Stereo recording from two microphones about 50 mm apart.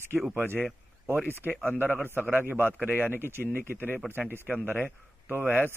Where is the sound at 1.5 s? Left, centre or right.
Left.